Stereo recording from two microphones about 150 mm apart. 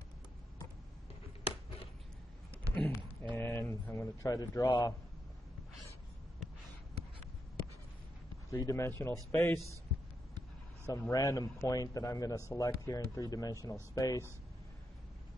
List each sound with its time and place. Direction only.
2.7 s a sound: 15° left (ahead or behind)
3.3 s speech: 15° left (ahead or behind)
8.5 s a man's voice: 20° left (ahead or behind)
10.9 s a man's voice: 25° left (ahead or behind)